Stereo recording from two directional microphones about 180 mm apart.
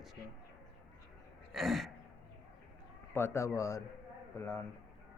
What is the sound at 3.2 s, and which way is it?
A man's voice, 15° left (ahead or behind).